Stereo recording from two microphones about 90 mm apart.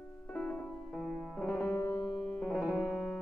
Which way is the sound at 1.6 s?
30° left (ahead or behind).